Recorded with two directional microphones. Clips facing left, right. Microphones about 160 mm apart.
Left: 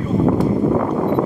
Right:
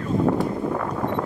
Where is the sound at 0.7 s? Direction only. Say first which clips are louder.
Left 8 dB; 30° left (ahead or behind).